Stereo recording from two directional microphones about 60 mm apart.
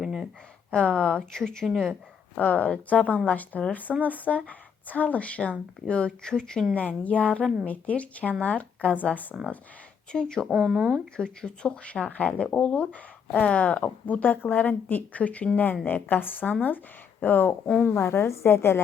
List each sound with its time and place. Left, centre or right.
0.0 s a sound: centre
0.7 s speech: centre
2.4 s speech: left
6.7 s speech: left
10.1 s speech: centre
10.6 s speech: right
11.2 s speech: centre
16.0 s a woman's voice: left
17.9 s a woman's voice: left